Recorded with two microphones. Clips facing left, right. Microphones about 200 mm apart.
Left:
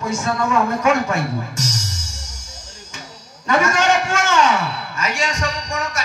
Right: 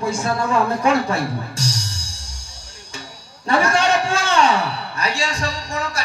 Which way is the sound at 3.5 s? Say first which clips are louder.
Even; 30° right (ahead or behind).